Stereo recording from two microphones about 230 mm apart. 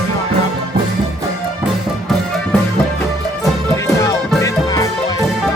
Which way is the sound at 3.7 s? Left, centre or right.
Centre.